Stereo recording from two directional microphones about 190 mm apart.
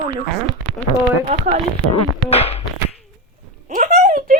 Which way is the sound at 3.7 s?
45° right (ahead or behind).